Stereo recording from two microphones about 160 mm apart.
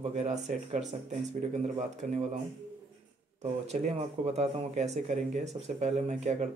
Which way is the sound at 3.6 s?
45° right (ahead or behind).